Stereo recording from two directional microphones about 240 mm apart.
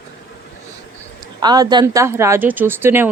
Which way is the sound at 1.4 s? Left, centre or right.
Centre.